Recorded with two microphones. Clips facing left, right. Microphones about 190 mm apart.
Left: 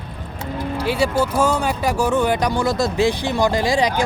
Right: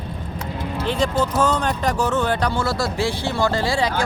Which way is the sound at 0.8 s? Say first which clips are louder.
Left 1 dB; 10° left (ahead or behind).